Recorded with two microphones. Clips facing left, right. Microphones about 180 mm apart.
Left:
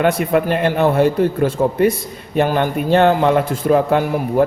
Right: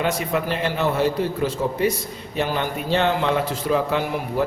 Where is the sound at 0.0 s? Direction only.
55° left (ahead or behind).